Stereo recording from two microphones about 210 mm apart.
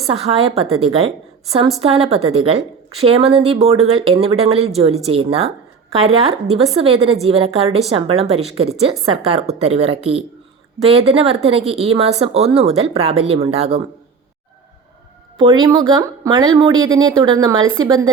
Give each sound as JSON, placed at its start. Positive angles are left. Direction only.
{"t": 0.1, "sound": "a woman's voice", "side_deg": -25}
{"t": 15.4, "sound": "a woman's voice", "side_deg": -20}